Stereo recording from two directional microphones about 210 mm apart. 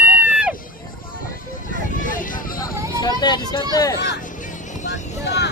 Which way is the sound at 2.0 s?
40° left (ahead or behind).